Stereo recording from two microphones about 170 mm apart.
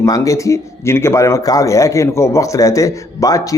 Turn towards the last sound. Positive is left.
turn(degrees=20)  # may be behind; listen again after turning